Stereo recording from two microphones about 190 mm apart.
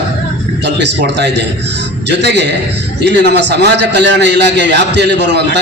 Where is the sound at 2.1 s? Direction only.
65° right (ahead or behind).